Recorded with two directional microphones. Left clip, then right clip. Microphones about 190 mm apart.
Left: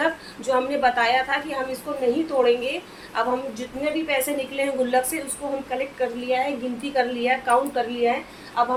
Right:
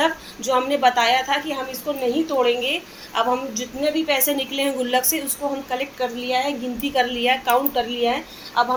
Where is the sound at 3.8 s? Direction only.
40° right (ahead or behind).